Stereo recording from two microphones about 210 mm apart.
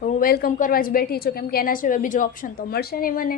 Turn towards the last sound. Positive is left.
turn(degrees=40)  # may be behind; listen again after turning